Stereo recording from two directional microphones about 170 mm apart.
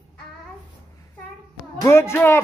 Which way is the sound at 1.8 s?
15° left (ahead or behind).